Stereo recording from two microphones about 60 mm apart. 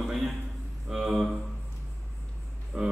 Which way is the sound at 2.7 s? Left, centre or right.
Right.